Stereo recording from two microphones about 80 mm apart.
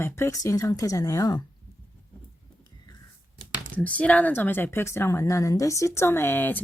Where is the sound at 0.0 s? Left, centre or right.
Left.